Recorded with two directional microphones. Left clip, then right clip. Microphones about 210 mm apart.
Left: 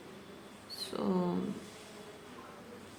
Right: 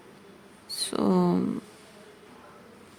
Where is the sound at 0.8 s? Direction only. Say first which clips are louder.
Right 9 dB; 55° right (ahead or behind).